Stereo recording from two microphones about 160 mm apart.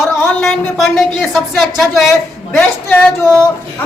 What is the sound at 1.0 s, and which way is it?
Speech, centre (ahead or behind).